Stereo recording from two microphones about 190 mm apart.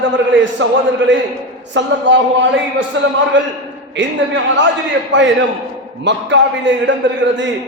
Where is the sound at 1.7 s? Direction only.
70° right (ahead or behind).